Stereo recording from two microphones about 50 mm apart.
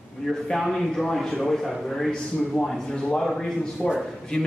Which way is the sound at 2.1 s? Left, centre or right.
Centre.